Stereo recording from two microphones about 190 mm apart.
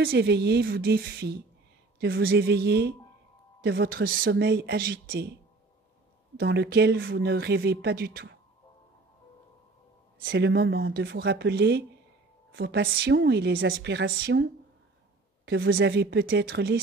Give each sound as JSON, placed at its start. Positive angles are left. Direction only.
{"t": 0.0, "sound": "speech", "side_deg": -55}
{"t": 6.4, "sound": "speech", "side_deg": -60}
{"t": 10.2, "sound": "speech", "side_deg": -65}